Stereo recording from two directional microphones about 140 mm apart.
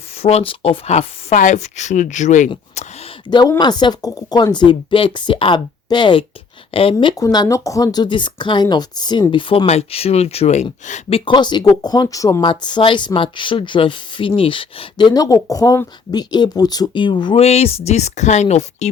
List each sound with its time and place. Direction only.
0.2 s speech: 45° left (ahead or behind)
3.2 s speech: 30° left (ahead or behind)
7.2 s speech: 25° left (ahead or behind)
9.6 s speech: 50° left (ahead or behind)
11.3 s speech: 30° left (ahead or behind)
12.5 s speech: 35° left (ahead or behind)
17.4 s speech: 45° left (ahead or behind)